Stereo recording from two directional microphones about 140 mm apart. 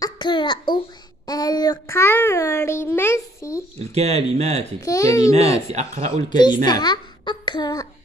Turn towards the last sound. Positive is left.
turn(degrees=30)  # may be behind; listen again after turning